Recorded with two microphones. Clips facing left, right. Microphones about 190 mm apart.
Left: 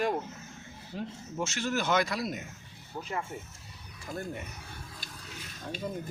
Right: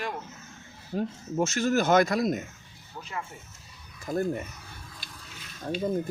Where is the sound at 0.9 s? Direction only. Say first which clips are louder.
Right 8 dB; 45° right (ahead or behind).